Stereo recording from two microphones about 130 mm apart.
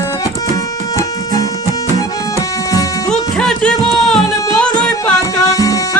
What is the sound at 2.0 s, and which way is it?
Music, 25° left (ahead or behind).